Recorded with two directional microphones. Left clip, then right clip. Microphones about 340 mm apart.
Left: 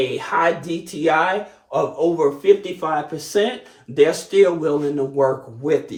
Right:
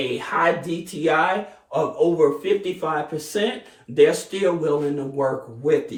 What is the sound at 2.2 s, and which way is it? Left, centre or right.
Speech, centre.